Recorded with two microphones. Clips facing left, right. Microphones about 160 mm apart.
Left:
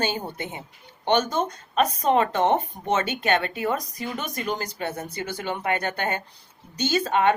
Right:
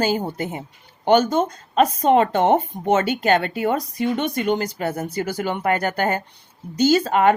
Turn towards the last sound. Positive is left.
turn(degrees=-35)  # may be behind; listen again after turning